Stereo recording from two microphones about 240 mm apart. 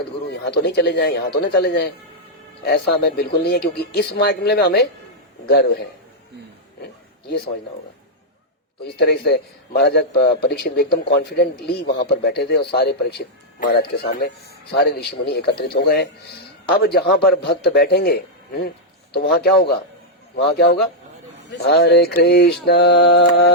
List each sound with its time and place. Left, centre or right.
0.4 s a man's voice: left
7.3 s a man's voice: left
8.8 s a man's voice: left